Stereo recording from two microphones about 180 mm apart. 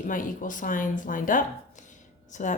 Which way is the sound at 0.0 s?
45° left (ahead or behind).